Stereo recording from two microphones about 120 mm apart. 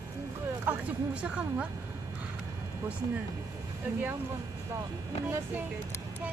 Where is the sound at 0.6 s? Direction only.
15° right (ahead or behind).